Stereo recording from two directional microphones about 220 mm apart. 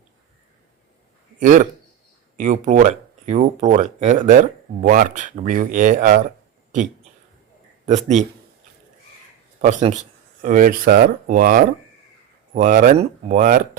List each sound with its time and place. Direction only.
1.4 s speech: 35° right (ahead or behind)
7.9 s speech: 30° right (ahead or behind)
9.6 s speech: 30° right (ahead or behind)